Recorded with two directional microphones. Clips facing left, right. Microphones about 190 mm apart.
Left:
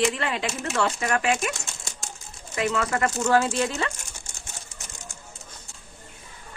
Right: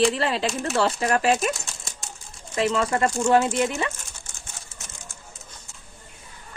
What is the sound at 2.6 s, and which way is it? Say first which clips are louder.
A woman's voice: right 3 dB; 25° right (ahead or behind).